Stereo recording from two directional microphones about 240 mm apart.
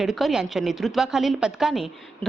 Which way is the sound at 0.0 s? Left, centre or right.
Centre.